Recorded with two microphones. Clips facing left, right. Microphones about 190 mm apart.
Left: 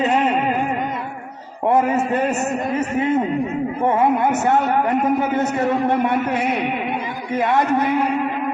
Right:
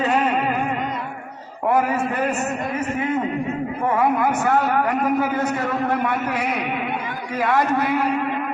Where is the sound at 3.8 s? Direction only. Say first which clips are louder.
Left 2 dB; 25° left (ahead or behind).